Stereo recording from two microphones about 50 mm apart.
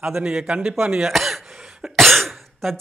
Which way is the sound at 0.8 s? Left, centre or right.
Centre.